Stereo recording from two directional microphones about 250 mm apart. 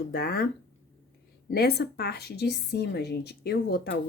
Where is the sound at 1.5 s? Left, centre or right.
Left.